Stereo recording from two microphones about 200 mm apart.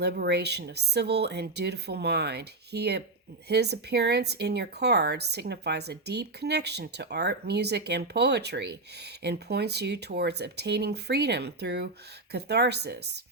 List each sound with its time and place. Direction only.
0.0 s speech: 55° right (ahead or behind)